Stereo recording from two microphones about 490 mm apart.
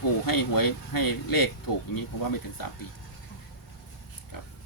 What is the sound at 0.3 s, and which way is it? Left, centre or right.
Speech, left.